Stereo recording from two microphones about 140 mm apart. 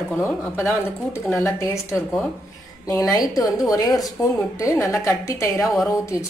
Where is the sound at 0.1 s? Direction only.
10° left (ahead or behind).